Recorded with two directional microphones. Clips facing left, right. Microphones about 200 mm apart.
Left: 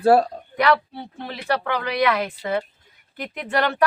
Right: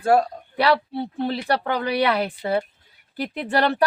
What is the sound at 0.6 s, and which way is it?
Speech, 35° right (ahead or behind).